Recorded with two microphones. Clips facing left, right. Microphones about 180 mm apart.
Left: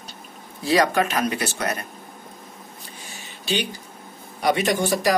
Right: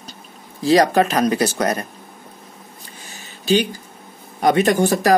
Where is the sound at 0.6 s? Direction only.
35° right (ahead or behind).